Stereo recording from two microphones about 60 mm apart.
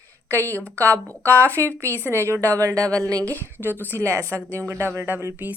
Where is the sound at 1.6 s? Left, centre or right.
Right.